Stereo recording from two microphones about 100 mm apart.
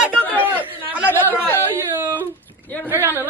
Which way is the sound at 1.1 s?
20° left (ahead or behind).